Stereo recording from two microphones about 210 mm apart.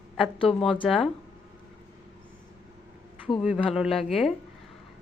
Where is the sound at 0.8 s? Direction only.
Centre (ahead or behind).